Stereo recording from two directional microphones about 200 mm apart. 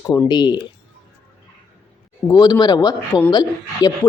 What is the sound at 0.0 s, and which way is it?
Speech, 15° left (ahead or behind).